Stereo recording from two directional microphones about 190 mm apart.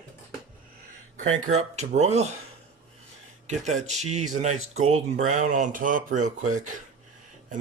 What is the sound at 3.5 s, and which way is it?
Speech, 35° right (ahead or behind).